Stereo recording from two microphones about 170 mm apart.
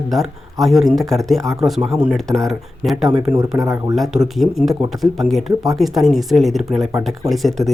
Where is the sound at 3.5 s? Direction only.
20° right (ahead or behind).